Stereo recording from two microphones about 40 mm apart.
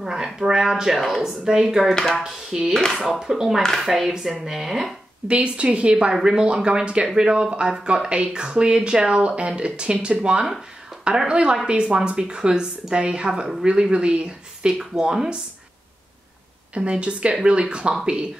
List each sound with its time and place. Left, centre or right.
0.0 s speech: centre
2.9 s speech: centre
5.3 s a woman's voice: right
16.7 s a woman's voice: right